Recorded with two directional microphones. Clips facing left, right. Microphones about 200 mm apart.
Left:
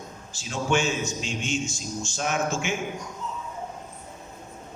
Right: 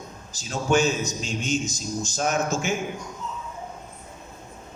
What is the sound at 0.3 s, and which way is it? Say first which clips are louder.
A man's voice: right 3 dB; 40° right (ahead or behind).